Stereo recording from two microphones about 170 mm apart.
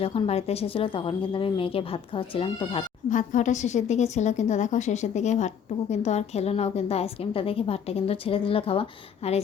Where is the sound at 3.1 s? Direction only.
50° left (ahead or behind).